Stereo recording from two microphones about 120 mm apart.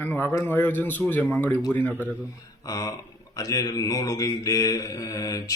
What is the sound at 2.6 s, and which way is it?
Speech, 30° left (ahead or behind).